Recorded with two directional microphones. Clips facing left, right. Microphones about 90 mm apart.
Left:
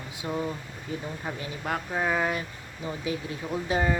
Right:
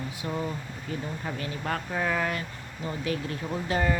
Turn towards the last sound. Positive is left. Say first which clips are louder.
# left 1 dB
turn(degrees=15)  # may be behind; listen again after turning